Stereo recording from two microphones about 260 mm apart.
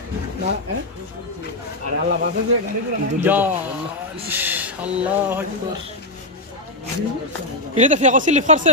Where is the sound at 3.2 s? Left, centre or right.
Centre.